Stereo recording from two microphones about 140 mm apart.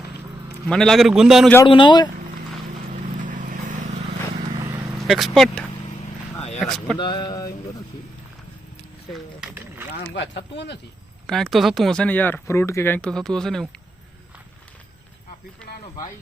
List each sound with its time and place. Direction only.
0.7 s speech: 5° left (ahead or behind)
1.6 s speech: 35° left (ahead or behind)
3.2 s vehicle: 65° right (ahead or behind)
4.9 s speech: centre (ahead or behind)
6.7 s speech: 5° left (ahead or behind)
7.0 s a sound: 30° left (ahead or behind)
11.3 s speech: 5° left (ahead or behind)